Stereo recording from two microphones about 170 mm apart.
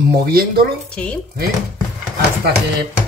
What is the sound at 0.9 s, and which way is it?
Speech, 5° left (ahead or behind).